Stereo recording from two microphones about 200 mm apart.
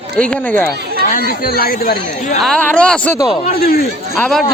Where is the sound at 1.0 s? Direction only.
45° left (ahead or behind).